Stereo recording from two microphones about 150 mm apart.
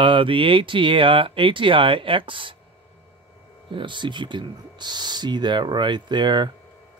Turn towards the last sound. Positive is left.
turn(degrees=-30)  # may be behind; listen again after turning